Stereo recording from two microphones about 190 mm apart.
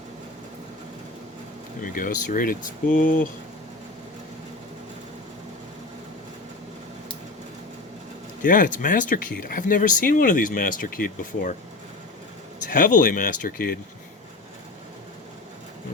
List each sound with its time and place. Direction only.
1.8 s speech: 45° left (ahead or behind)
8.4 s speech: 45° left (ahead or behind)
12.7 s speech: 45° left (ahead or behind)